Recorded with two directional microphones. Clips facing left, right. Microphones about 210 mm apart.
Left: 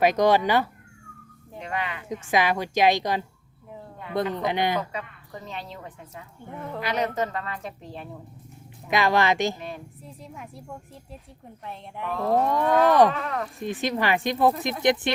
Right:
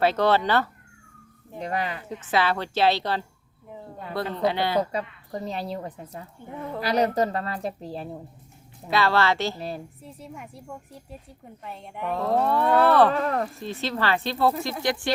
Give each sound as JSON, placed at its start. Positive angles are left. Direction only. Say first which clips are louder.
{"t": 0.0, "sound": "a woman's voice", "louder": "left 2 dB", "side_deg": 15}
{"t": 1.5, "sound": "a woman's voice", "louder": "right 3 dB", "side_deg": -35}
{"t": 2.0, "sound": "a woman's voice", "louder": "left 2 dB", "side_deg": 15}
{"t": 4.8, "sound": "a woman's voice", "louder": "right 6 dB", "side_deg": -35}
{"t": 8.9, "sound": "a woman's voice", "louder": "even", "side_deg": 15}
{"t": 9.6, "sound": "a woman's voice", "louder": "right 3 dB", "side_deg": -35}
{"t": 10.0, "sound": "a woman's voice", "louder": "right 1 dB", "side_deg": 0}
{"t": 11.6, "sound": "a woman's voice", "louder": "right 2 dB", "side_deg": 0}
{"t": 12.4, "sound": "a woman's voice", "louder": "right 1 dB", "side_deg": 15}
{"t": 13.1, "sound": "a woman's voice", "louder": "right 5 dB", "side_deg": -40}
{"t": 13.6, "sound": "a woman's voice", "louder": "left 2 dB", "side_deg": 15}